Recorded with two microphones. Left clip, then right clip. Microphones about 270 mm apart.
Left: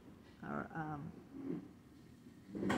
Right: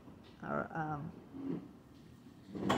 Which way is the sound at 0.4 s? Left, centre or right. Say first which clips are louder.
Right 6 dB; centre.